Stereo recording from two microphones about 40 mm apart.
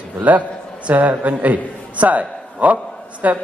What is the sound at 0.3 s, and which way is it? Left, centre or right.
A man's voice, right.